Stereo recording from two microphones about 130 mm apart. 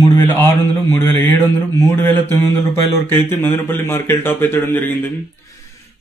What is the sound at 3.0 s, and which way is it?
Speech, 15° left (ahead or behind).